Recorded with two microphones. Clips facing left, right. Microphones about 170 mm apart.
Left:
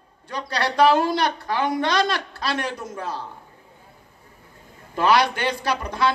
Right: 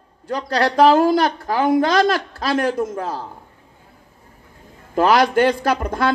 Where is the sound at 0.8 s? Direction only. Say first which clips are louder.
Right 4 dB; 45° right (ahead or behind).